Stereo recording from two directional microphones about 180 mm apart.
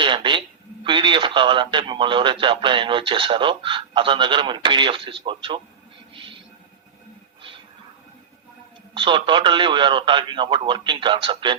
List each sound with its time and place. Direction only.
0.0 s speech: 25° right (ahead or behind)
6.1 s music: 30° right (ahead or behind)
9.0 s speech: 25° right (ahead or behind)